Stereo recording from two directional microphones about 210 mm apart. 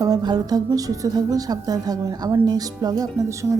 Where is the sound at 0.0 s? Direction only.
20° right (ahead or behind).